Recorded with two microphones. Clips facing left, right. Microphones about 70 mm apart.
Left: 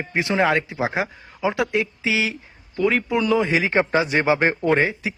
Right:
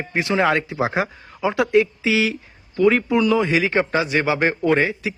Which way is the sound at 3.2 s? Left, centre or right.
Left.